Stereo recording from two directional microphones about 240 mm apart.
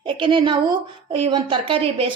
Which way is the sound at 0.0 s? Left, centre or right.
Right.